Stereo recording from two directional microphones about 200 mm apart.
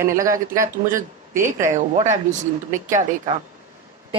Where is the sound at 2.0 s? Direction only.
35° right (ahead or behind).